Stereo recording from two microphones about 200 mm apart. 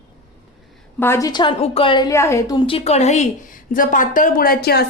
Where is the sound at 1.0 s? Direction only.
15° left (ahead or behind).